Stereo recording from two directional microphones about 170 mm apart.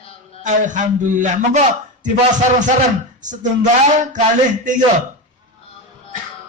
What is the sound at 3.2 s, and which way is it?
Speech, 45° right (ahead or behind).